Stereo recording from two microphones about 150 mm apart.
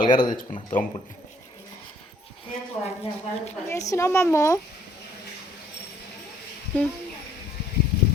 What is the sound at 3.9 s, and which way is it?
Speech, 20° left (ahead or behind).